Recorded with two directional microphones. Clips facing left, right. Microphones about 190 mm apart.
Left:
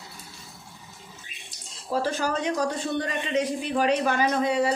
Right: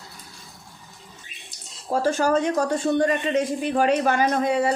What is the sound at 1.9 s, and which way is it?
Speech, 45° right (ahead or behind).